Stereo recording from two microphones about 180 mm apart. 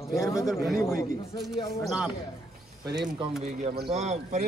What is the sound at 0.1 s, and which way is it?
Speech, 15° left (ahead or behind).